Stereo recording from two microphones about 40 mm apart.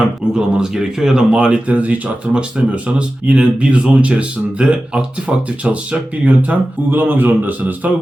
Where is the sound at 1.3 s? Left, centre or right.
Right.